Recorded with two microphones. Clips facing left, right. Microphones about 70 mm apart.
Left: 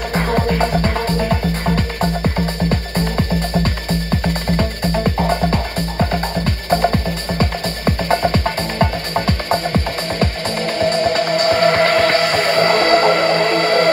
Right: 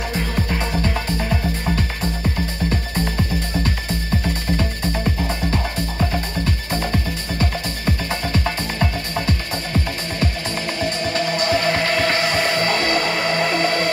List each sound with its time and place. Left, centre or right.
0.1 s music: left
2.7 s music: left
4.3 s music: left